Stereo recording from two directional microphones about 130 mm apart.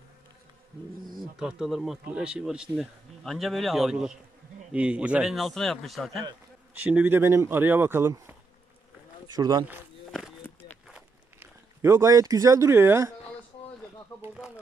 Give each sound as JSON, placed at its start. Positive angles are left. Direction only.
{"t": 1.3, "sound": "speech", "side_deg": -5}
{"t": 6.7, "sound": "speech", "side_deg": -10}
{"t": 9.3, "sound": "speech", "side_deg": -30}
{"t": 11.3, "sound": "speech", "side_deg": -20}